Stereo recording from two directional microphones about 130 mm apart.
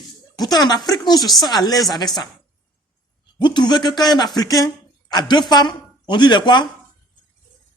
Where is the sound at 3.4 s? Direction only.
35° left (ahead or behind).